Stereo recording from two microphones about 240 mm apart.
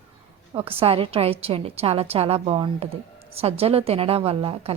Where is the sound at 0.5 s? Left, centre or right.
Right.